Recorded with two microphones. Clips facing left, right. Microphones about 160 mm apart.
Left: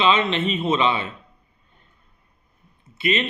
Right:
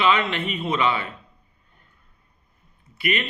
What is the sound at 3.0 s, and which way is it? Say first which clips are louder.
Speech: left 3 dB; 25° left (ahead or behind).